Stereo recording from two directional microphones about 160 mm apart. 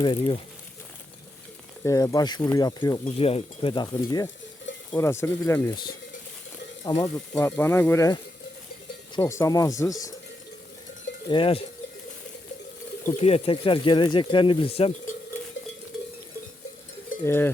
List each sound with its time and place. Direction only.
0.0 s speech: 30° left (ahead or behind)
1.8 s speech: 20° left (ahead or behind)
3.2 s speech: 35° left (ahead or behind)
4.9 s stir: 15° left (ahead or behind)
5.6 s speech: 25° left (ahead or behind)
7.1 s stir: 15° left (ahead or behind)
9.1 s speech: 20° left (ahead or behind)
11.3 s speech: 35° left (ahead or behind)
13.1 s speech: 40° left (ahead or behind)
17.2 s stir: 15° left (ahead or behind)